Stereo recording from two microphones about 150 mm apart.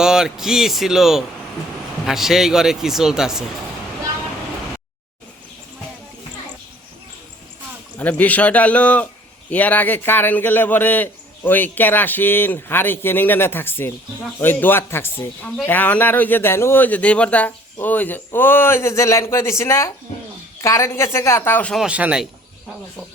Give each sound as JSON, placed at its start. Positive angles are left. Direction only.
{"t": 0.0, "sound": "speech", "side_deg": -5}
{"t": 7.9, "sound": "a man's voice", "side_deg": 10}
{"t": 21.8, "sound": "speech", "side_deg": -10}